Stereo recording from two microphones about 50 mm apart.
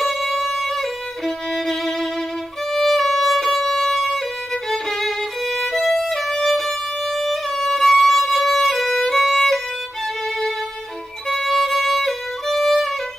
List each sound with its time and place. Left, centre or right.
0.0 s violin: centre
2.7 s music: centre
4.6 s violin: centre
7.2 s music: centre
11.2 s violin: centre